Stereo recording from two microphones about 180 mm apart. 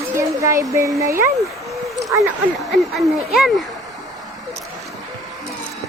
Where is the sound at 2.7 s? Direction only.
Centre (ahead or behind).